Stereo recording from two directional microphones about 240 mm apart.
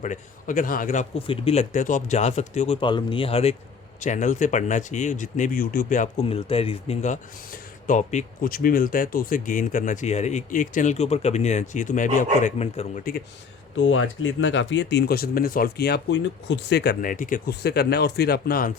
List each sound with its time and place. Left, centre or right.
0.0 s speech: left
13.7 s speech: left